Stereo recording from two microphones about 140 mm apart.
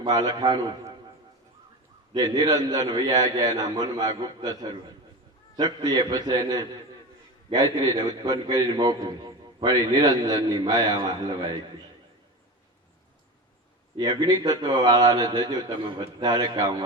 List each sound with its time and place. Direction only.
0.0 s a man's voice: 30° right (ahead or behind)
2.1 s a man's voice: 30° right (ahead or behind)
13.9 s a man's voice: 30° right (ahead or behind)